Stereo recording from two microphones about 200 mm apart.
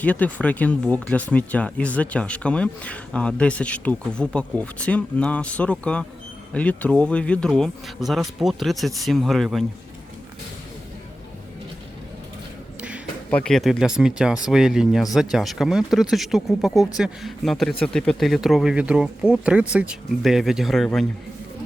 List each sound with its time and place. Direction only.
0.0 s speech: 5° left (ahead or behind)
13.3 s speech: 5° left (ahead or behind)